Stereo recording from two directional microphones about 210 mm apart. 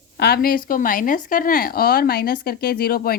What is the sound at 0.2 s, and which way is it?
A woman's voice, 45° left (ahead or behind).